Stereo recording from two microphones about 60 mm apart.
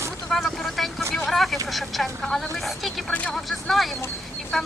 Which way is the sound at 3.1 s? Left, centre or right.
Left.